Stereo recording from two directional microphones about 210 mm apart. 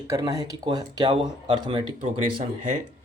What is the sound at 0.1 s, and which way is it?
Speech, 15° right (ahead or behind).